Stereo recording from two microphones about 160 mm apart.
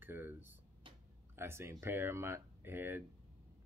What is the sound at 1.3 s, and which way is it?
Speech, 15° right (ahead or behind).